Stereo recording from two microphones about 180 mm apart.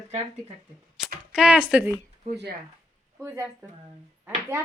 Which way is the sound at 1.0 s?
Centre (ahead or behind).